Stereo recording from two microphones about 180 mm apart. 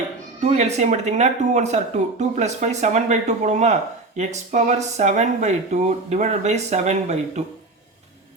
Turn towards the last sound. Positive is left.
turn(degrees=-40)  # may be behind; listen again after turning